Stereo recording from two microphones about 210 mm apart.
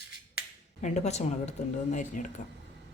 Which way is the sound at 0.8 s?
30° left (ahead or behind).